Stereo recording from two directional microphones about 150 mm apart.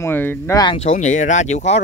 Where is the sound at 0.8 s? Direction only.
55° left (ahead or behind).